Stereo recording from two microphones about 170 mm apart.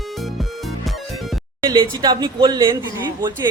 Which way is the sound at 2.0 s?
25° right (ahead or behind).